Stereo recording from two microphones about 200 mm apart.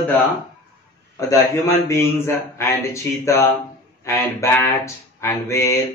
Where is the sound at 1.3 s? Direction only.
15° left (ahead or behind).